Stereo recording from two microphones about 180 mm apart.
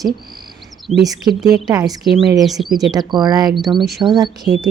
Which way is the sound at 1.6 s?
20° right (ahead or behind).